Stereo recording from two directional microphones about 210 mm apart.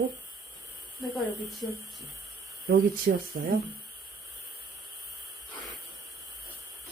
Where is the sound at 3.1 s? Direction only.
45° right (ahead or behind).